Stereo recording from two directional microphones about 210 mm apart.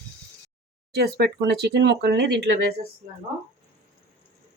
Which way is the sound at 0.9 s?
50° right (ahead or behind).